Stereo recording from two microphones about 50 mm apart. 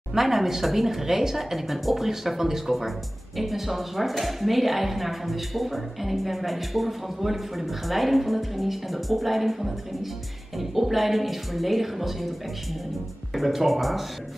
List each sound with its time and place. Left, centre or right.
0.1 s speech: centre